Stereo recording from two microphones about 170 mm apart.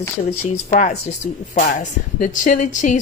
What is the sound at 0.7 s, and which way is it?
Speech, 45° left (ahead or behind).